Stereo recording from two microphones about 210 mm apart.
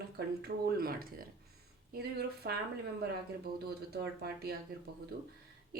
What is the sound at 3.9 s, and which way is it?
Speech, 50° right (ahead or behind).